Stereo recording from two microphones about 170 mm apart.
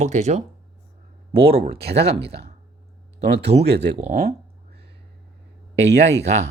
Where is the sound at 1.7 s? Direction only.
75° right (ahead or behind).